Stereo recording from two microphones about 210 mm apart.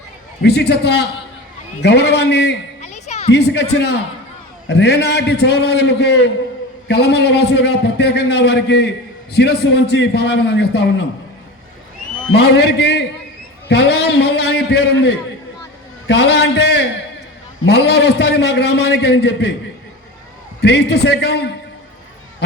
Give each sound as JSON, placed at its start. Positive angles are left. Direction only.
{"t": 0.4, "sound": "a man's voice", "side_deg": 50}
{"t": 2.8, "sound": "music", "side_deg": 35}
{"t": 3.3, "sound": "a man's voice", "side_deg": 55}
{"t": 12.3, "sound": "a man's voice", "side_deg": 50}
{"t": 20.6, "sound": "a man's voice", "side_deg": 55}